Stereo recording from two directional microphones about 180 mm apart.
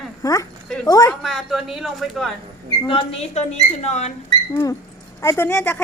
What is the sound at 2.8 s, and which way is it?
Speech, 30° left (ahead or behind).